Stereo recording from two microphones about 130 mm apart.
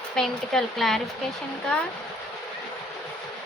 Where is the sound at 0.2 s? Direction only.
Centre (ahead or behind).